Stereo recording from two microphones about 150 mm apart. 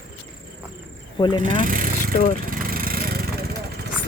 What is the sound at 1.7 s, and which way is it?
Vehicle, 65° right (ahead or behind).